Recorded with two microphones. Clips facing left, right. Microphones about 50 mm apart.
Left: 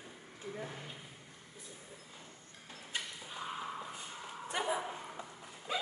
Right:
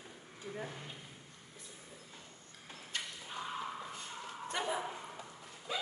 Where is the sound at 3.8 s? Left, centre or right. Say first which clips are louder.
Even; centre.